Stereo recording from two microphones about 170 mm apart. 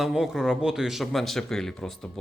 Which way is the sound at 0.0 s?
Centre (ahead or behind).